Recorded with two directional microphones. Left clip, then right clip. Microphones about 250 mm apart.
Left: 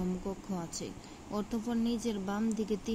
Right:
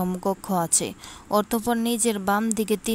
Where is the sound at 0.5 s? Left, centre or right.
Right.